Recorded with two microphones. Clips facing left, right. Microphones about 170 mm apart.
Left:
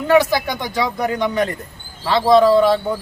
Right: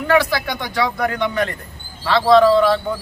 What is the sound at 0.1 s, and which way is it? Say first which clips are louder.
A man's voice: left 3 dB; 20° left (ahead or behind).